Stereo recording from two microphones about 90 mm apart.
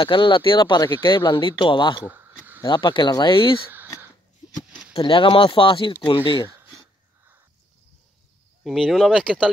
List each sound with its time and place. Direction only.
0.0 s speech: 65° left (ahead or behind)
2.0 s a sound: 20° right (ahead or behind)
2.7 s speech: 65° left (ahead or behind)
4.9 s speech: 75° left (ahead or behind)
8.6 s speech: centre (ahead or behind)